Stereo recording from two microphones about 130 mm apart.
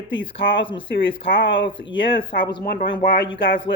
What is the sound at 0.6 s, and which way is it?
Speech, 40° left (ahead or behind).